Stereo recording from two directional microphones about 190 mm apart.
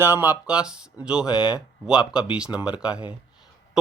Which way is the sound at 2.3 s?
5° right (ahead or behind).